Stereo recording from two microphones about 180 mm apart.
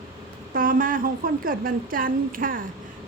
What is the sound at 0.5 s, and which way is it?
A woman's voice, 50° right (ahead or behind).